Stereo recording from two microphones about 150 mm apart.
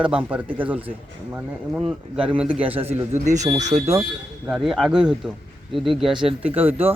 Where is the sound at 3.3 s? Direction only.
50° right (ahead or behind).